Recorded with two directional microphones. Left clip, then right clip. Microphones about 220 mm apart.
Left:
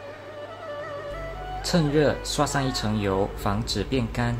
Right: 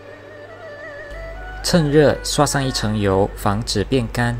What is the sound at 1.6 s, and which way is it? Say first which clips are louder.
Speech: right 8 dB; 20° right (ahead or behind).